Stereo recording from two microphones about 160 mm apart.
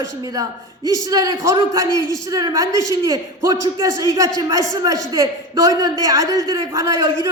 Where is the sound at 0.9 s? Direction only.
20° right (ahead or behind).